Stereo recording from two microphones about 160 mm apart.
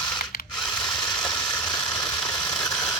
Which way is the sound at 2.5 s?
5° left (ahead or behind).